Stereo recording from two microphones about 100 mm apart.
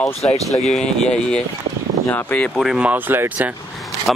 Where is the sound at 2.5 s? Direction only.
Centre (ahead or behind).